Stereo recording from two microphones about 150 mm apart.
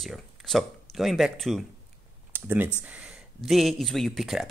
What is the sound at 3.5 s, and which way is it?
Speech, centre (ahead or behind).